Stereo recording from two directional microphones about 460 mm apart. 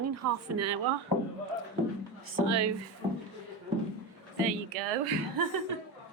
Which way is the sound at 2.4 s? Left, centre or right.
Right.